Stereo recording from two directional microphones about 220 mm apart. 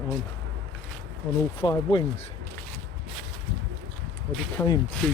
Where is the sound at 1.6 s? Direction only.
20° left (ahead or behind).